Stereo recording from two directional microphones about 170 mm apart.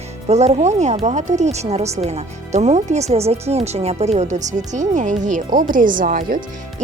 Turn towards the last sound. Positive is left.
turn(degrees=-55)  # may be behind; listen again after turning